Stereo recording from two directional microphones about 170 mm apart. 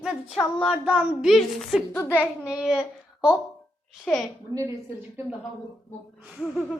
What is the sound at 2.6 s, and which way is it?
A woman's voice, 5° right (ahead or behind).